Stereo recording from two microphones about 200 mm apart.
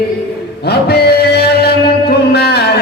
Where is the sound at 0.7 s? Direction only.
55° left (ahead or behind).